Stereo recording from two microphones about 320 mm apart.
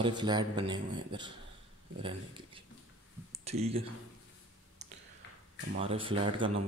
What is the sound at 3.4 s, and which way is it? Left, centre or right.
Speech, centre.